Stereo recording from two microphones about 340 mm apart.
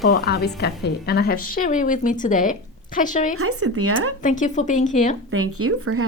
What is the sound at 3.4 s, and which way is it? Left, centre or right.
Speech, right.